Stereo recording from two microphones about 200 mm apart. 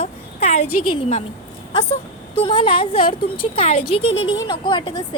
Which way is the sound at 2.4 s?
25° left (ahead or behind).